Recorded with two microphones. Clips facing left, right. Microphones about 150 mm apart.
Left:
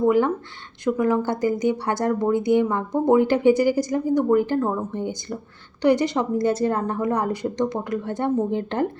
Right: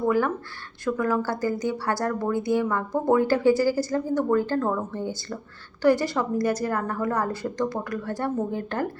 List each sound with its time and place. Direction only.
0.0 s speech: 20° left (ahead or behind)